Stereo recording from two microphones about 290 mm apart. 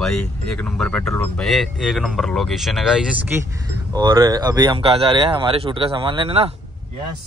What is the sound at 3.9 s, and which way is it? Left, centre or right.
Speech, centre.